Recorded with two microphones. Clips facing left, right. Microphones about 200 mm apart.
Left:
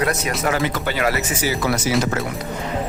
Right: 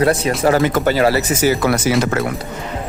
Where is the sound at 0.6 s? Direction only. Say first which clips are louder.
Right 7 dB; 50° right (ahead or behind).